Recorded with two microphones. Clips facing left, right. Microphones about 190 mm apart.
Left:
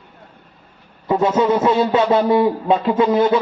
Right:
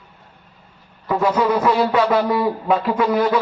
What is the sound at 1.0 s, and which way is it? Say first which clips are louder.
A man's voice: left 2 dB; 25° left (ahead or behind).